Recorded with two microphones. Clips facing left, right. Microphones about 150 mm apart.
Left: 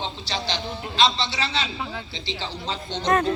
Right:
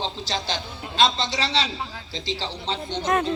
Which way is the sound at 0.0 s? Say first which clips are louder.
Right 1 dB; 45° right (ahead or behind).